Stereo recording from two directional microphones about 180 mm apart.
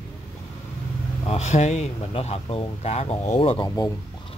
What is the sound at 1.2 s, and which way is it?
Speech, 40° left (ahead or behind).